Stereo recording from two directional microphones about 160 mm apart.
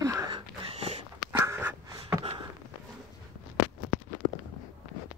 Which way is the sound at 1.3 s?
15° right (ahead or behind).